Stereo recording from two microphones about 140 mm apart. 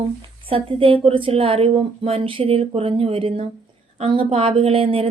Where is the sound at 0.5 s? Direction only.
40° right (ahead or behind).